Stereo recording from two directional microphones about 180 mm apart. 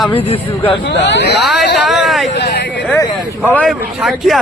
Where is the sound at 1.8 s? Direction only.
Centre (ahead or behind).